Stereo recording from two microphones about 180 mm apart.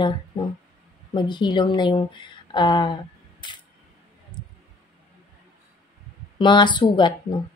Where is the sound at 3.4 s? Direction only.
25° left (ahead or behind).